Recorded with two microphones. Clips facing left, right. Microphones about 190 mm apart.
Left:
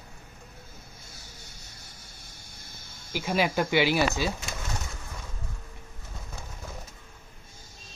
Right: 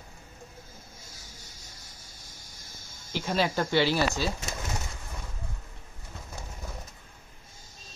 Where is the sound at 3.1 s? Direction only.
10° left (ahead or behind).